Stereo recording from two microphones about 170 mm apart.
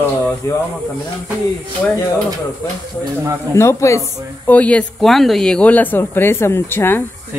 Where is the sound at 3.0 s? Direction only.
20° right (ahead or behind).